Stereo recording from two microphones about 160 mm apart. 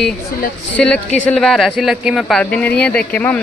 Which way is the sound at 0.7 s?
10° left (ahead or behind).